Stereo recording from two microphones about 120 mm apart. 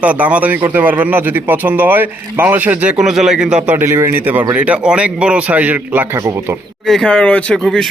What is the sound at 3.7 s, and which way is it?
A man's voice, 20° right (ahead or behind).